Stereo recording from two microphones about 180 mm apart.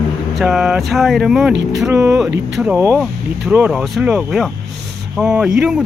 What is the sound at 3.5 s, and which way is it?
Speech, 5° right (ahead or behind).